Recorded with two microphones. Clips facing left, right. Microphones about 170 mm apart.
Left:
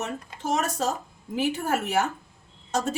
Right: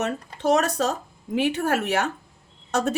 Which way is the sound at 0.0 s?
70° right (ahead or behind).